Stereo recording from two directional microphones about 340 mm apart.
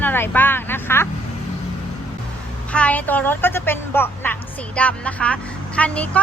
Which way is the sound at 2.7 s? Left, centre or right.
Centre.